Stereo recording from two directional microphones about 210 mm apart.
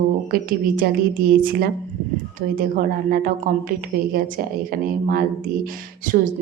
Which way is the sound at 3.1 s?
40° right (ahead or behind).